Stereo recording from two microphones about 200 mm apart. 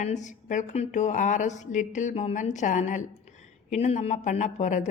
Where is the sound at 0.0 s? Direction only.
35° left (ahead or behind).